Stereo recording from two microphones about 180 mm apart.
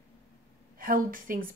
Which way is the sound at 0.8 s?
50° right (ahead or behind).